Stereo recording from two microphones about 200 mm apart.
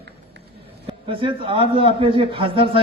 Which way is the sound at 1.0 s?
25° right (ahead or behind).